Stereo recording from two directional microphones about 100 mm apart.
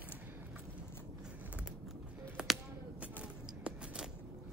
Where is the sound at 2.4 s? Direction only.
10° right (ahead or behind).